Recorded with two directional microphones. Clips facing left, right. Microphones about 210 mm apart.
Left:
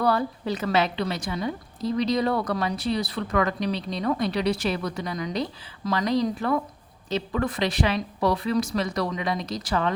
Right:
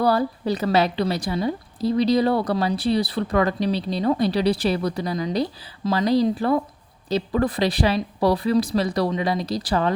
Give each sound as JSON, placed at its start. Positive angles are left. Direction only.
{"t": 0.0, "sound": "a woman's voice", "side_deg": -35}